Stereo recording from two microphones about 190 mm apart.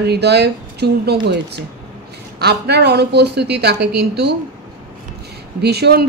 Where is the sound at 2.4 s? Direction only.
60° right (ahead or behind).